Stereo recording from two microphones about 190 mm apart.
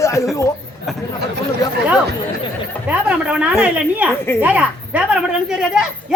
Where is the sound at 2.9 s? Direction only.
5° right (ahead or behind).